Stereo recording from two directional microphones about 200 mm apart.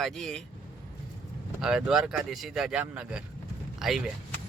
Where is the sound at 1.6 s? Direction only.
5° right (ahead or behind).